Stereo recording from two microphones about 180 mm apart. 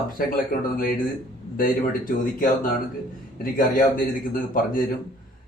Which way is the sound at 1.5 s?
50° left (ahead or behind).